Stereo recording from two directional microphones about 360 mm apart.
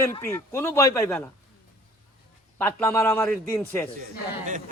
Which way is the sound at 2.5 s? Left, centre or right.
Centre.